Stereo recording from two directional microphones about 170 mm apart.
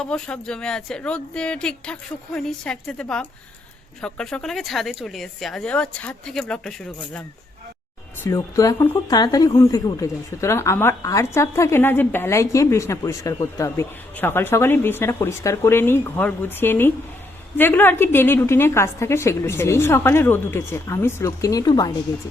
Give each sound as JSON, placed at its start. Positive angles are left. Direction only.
{"t": 0.0, "sound": "speech", "side_deg": 5}
{"t": 8.2, "sound": "a woman's voice", "side_deg": 20}